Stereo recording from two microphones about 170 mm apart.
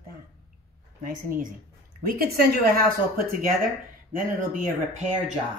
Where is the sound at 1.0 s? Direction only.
55° right (ahead or behind).